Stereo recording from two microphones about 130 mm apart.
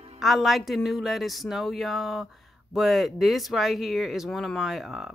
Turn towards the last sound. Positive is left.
turn(degrees=0)  # may be behind; listen again after turning